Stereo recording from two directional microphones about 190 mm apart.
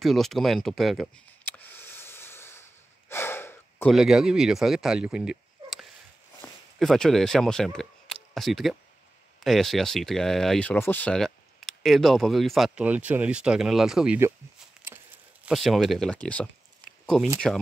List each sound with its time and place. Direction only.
0.0 s a sound: centre (ahead or behind)
3.1 s gasp: 10° left (ahead or behind)
3.9 s speech: 5° right (ahead or behind)
6.4 s a sound: 20° left (ahead or behind)
6.8 s speech: centre (ahead or behind)
15.4 s speech: centre (ahead or behind)